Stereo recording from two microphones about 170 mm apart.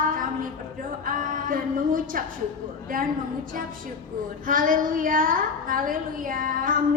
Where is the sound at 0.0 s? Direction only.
55° right (ahead or behind).